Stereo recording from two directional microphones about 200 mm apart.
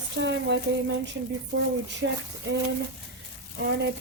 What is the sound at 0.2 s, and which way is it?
Speech, 60° right (ahead or behind).